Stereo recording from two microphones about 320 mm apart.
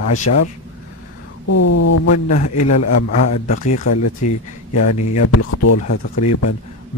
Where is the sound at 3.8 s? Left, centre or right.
Left.